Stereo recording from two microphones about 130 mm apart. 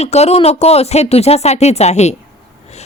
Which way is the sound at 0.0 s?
55° left (ahead or behind).